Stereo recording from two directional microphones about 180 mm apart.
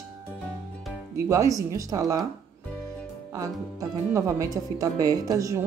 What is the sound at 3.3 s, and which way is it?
Speech, 20° right (ahead or behind).